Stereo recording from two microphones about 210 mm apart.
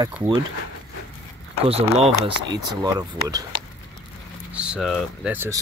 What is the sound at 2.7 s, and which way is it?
Speech, 20° right (ahead or behind).